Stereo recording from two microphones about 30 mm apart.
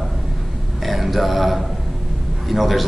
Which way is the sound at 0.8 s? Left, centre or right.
Centre.